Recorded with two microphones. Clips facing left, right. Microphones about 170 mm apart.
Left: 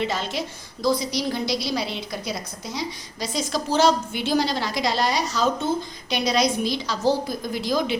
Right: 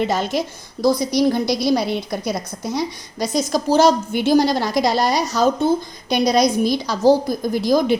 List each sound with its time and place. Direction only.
0.0 s a woman's voice: 45° right (ahead or behind)